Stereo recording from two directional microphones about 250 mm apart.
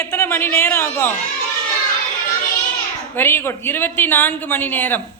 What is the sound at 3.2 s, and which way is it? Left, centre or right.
A man's voice, centre.